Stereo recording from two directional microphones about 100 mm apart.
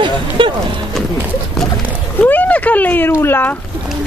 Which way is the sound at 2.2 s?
15° left (ahead or behind).